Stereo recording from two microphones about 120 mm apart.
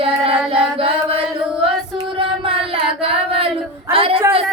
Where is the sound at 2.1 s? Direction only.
50° right (ahead or behind).